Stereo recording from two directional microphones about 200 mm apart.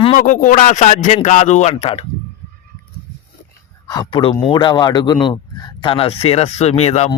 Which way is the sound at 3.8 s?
20° left (ahead or behind).